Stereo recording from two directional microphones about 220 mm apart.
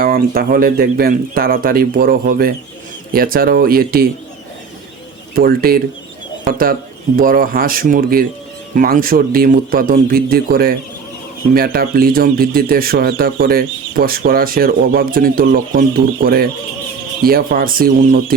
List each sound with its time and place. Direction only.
0.0 s speech: 40° right (ahead or behind)
5.3 s speech: 40° right (ahead or behind)